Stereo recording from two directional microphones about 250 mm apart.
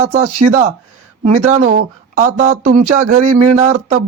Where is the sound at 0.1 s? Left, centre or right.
Right.